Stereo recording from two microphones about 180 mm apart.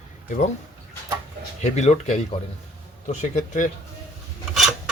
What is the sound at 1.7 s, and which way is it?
Speech, 40° left (ahead or behind).